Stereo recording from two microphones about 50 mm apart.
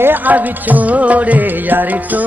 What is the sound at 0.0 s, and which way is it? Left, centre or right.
Music, right.